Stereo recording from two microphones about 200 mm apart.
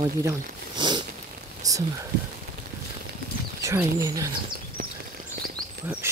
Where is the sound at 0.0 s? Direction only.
20° right (ahead or behind).